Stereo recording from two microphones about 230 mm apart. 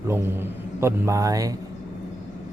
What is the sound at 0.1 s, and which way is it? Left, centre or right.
Speech, centre.